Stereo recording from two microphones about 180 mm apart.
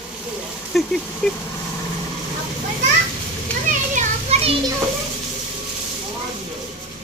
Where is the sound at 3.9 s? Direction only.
35° right (ahead or behind).